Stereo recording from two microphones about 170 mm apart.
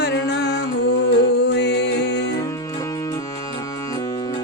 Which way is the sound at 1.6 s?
90° left.